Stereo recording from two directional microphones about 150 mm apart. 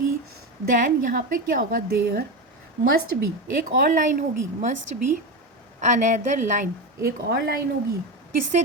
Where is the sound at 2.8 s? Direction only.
75° right (ahead or behind); by 6.6 s 55° right (ahead or behind).